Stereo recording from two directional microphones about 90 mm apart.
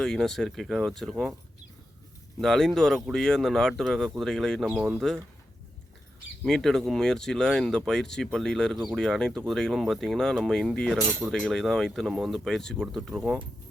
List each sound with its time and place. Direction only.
0.0 s speech: 5° left (ahead or behind)
2.4 s speech: 5° left (ahead or behind)
4.7 s speech: 15° right (ahead or behind)
4.9 s speech: 5° left (ahead or behind)
6.4 s speech: 5° left (ahead or behind)
11.0 s cutlery: 20° right (ahead or behind)
11.3 s speech: 5° left (ahead or behind)